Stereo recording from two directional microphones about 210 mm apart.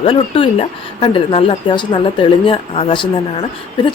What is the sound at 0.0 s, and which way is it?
Speech, 25° left (ahead or behind).